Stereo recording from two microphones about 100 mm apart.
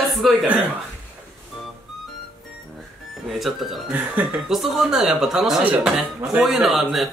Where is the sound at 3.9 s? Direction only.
15° right (ahead or behind).